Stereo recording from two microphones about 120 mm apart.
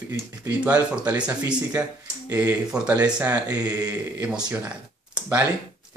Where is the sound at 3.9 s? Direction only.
10° right (ahead or behind).